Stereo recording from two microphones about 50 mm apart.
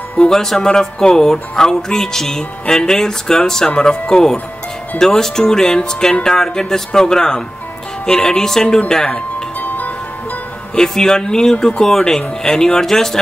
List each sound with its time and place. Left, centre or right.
0.2 s speech: centre
9.6 s music: left
10.7 s speech: centre